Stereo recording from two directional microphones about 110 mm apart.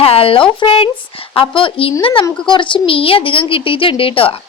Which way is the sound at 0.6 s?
55° left (ahead or behind).